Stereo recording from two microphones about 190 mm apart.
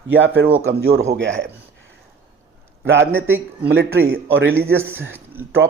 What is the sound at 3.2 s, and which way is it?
Speech, 10° right (ahead or behind).